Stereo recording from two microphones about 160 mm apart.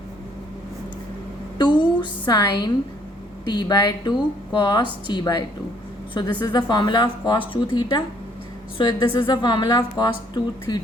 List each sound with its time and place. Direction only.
1.5 s a woman's voice: 30° left (ahead or behind)